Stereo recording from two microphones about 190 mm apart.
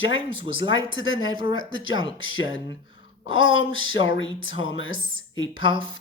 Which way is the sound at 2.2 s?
90° left.